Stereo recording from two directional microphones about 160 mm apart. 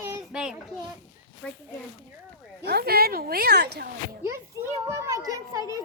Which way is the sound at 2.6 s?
80° right.